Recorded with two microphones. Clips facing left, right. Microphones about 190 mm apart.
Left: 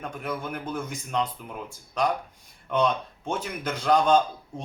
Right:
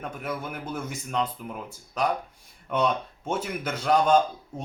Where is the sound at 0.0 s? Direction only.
5° right (ahead or behind).